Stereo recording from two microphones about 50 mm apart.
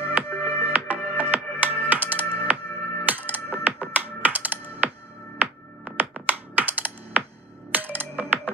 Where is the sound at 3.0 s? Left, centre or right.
Right.